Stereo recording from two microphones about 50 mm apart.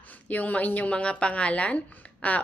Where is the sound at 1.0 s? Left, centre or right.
Left.